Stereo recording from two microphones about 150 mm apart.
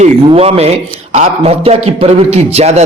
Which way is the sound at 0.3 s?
40° right (ahead or behind).